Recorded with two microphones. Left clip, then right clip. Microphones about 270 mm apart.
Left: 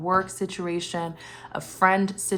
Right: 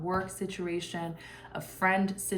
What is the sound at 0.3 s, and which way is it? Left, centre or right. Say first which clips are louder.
A woman's voice: left 6 dB; centre.